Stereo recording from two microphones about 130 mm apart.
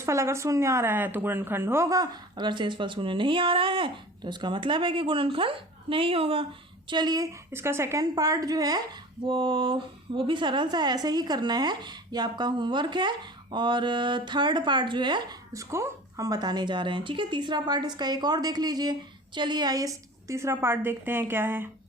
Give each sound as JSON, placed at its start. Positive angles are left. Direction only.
{"t": 0.0, "sound": "speech", "side_deg": -20}
{"t": 6.8, "sound": "speech", "side_deg": -35}
{"t": 7.5, "sound": "a woman's voice", "side_deg": -20}
{"t": 9.2, "sound": "speech", "side_deg": -40}
{"t": 15.5, "sound": "speech", "side_deg": -25}